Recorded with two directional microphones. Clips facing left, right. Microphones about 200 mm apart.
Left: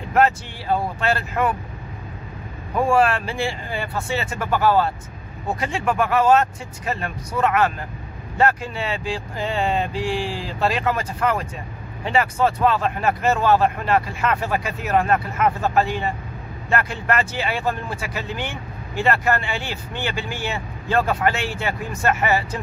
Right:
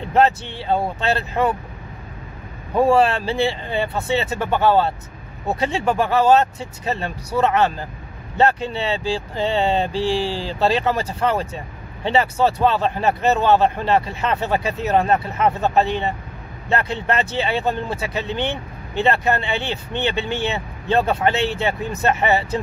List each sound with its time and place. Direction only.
0.1 s speech: 25° right (ahead or behind)
2.7 s speech: 25° right (ahead or behind)